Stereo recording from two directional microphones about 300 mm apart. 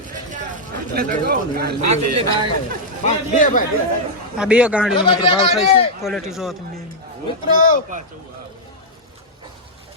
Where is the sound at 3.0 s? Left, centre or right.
Left.